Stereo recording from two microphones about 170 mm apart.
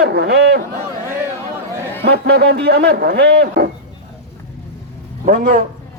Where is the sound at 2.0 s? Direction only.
70° right (ahead or behind).